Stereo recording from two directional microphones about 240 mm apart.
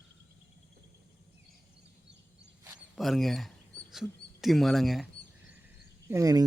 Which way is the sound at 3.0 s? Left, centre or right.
Centre.